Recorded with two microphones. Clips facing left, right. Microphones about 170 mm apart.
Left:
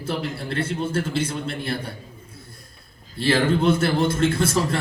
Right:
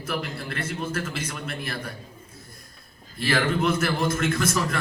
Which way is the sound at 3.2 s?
30° left (ahead or behind).